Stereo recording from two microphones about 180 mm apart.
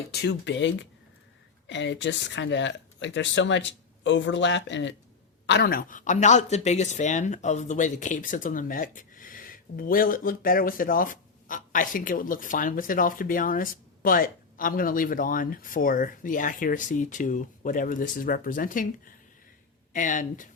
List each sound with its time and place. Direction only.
0.1 s speech: 65° left (ahead or behind); by 4.9 s 90° left
5.5 s speech: 65° left (ahead or behind); by 18.9 s 50° left (ahead or behind)
19.9 s speech: 45° left (ahead or behind)